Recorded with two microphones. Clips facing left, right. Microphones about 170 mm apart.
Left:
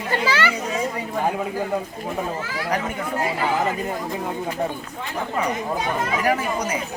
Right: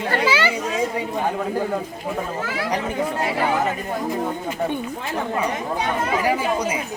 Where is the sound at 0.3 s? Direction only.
10° right (ahead or behind).